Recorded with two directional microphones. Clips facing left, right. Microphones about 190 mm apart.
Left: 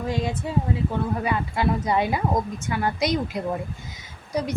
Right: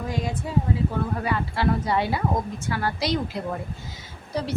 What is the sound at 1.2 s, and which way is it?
A woman's voice, 20° left (ahead or behind).